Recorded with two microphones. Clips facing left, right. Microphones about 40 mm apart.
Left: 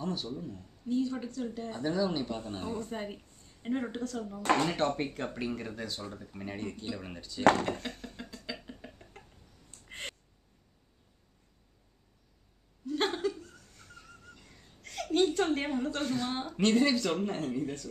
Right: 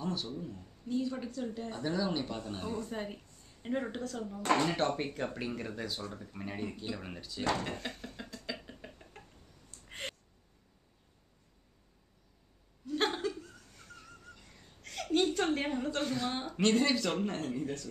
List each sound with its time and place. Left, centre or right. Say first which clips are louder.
0.0 s speech: left 1 dB; centre
2.4 s speech: left 1 dB; left
2.7 s speech: left 1 dB; centre
7.7 s a sound: left 1 dB; centre
9.8 s gasp: even; centre
12.8 s laughter: left 2 dB; centre
14.3 s a sound: even; centre